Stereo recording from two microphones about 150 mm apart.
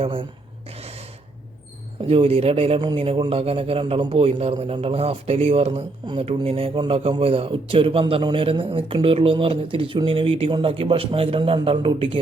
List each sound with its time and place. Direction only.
0.0 s speech: 35° right (ahead or behind)
2.0 s speech: 40° right (ahead or behind)